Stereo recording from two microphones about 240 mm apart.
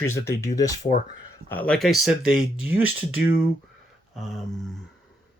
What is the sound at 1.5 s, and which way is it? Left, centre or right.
Speech, centre.